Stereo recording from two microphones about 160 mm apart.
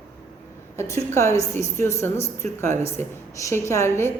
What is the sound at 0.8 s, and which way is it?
A woman's voice, 20° left (ahead or behind).